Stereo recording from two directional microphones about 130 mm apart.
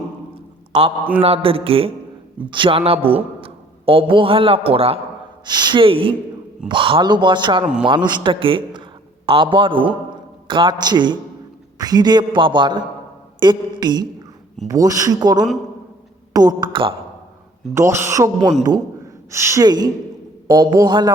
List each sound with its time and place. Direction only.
0.7 s a man's voice: 45° right (ahead or behind)
5.5 s a man's voice: 35° right (ahead or behind)
7.6 s a man's voice: 5° right (ahead or behind)
7.9 s a man's voice: 35° right (ahead or behind)
17.7 s speech: 20° right (ahead or behind)
19.3 s speech: 20° right (ahead or behind)
19.6 s a man's voice: 30° right (ahead or behind)